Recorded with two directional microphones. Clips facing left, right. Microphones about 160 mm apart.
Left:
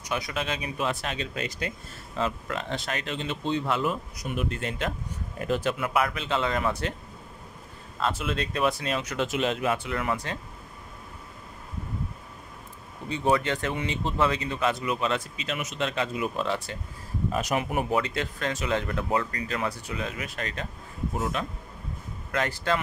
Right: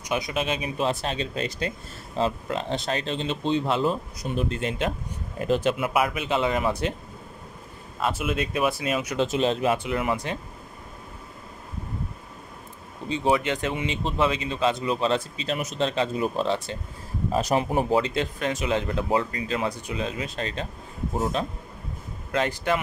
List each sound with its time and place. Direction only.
0.0 s speech: 20° right (ahead or behind)
8.0 s speech: 10° right (ahead or behind)
9.1 s speech: 25° right (ahead or behind)
13.1 s speech: 20° right (ahead or behind)